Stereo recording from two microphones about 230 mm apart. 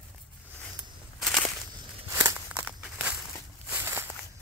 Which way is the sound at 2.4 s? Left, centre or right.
Centre.